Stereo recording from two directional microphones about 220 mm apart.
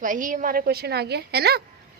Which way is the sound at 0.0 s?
35° right (ahead or behind).